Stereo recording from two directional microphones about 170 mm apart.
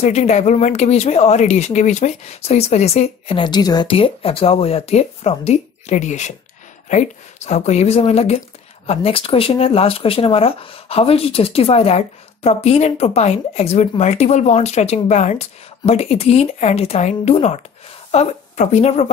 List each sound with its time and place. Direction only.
0.0 s a woman's voice: 40° left (ahead or behind)